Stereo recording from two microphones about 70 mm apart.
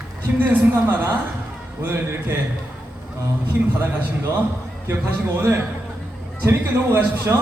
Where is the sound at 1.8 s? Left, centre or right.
Right.